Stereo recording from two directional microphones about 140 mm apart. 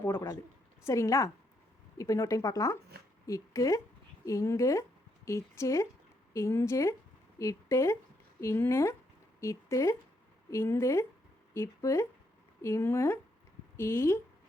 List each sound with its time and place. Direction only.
0.0 s speech: 20° left (ahead or behind)